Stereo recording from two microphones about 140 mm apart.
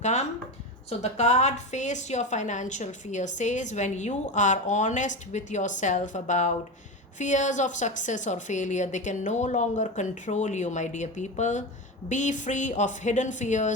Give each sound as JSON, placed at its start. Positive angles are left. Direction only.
{"t": 0.0, "sound": "a woman's voice", "side_deg": 55}